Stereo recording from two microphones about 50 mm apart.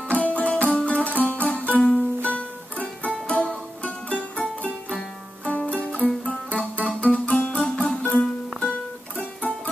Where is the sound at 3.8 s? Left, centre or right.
Left.